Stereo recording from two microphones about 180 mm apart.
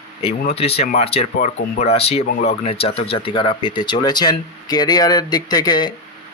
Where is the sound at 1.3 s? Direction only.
45° left (ahead or behind); by 5.9 s 25° left (ahead or behind).